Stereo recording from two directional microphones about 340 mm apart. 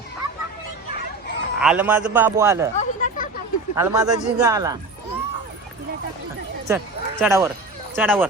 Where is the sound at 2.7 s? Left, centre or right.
Left.